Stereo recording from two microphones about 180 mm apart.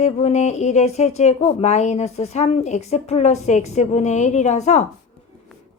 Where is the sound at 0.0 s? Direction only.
40° left (ahead or behind).